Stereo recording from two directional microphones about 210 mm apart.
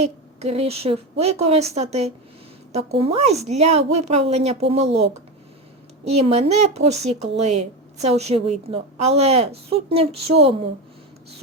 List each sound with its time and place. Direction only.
0.0 s a woman's voice: 30° right (ahead or behind)
6.1 s speech: 30° right (ahead or behind)